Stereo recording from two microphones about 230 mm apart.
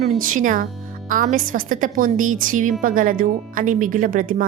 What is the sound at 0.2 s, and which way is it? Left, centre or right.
Speech, right.